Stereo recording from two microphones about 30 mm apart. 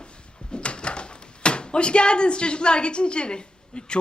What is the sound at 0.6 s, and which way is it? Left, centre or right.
Speech, left.